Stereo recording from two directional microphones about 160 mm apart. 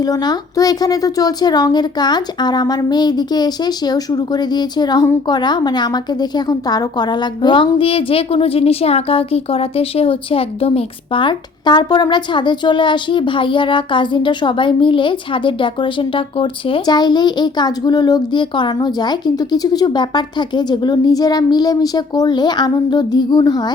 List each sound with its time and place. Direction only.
0.0 s a woman's voice: 25° left (ahead or behind)